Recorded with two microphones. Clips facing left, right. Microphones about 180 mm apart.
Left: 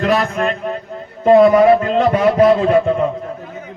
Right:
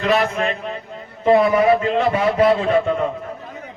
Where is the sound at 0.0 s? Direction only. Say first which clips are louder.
Left 2 dB; 45° left (ahead or behind).